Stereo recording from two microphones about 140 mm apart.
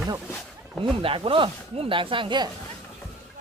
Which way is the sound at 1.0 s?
40° right (ahead or behind).